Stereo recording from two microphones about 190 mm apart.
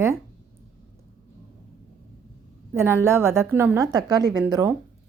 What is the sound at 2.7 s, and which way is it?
A woman's voice, 10° right (ahead or behind).